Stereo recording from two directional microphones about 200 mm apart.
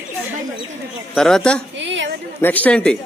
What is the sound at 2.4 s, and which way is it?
Speech, 10° left (ahead or behind).